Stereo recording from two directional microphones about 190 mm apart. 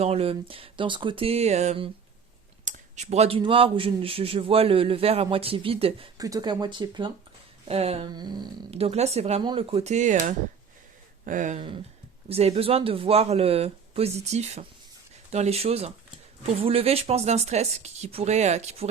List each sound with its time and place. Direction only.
0.0 s a man's voice: 30° right (ahead or behind)
6.1 s a man's voice: 20° right (ahead or behind); by 18.9 s 35° right (ahead or behind)